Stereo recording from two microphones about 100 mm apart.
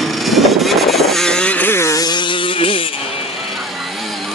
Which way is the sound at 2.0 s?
50° left (ahead or behind).